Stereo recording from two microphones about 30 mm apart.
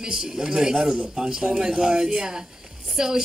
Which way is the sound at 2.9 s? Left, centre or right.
Centre.